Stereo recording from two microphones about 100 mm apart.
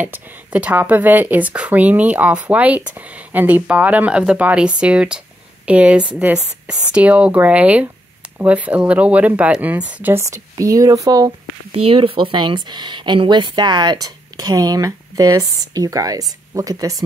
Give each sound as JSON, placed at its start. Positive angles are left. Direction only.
{"t": 0.0, "sound": "speech", "side_deg": -15}
{"t": 10.1, "sound": "speech", "side_deg": -30}
{"t": 11.7, "sound": "speech", "side_deg": -75}